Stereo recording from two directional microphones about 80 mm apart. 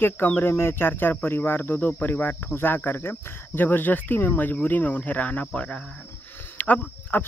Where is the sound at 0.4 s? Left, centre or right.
Left.